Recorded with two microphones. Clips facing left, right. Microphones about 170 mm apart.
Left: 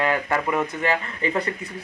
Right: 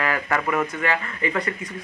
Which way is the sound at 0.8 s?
35° left (ahead or behind).